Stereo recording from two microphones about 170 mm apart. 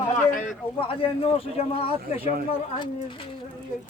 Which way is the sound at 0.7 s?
30° left (ahead or behind).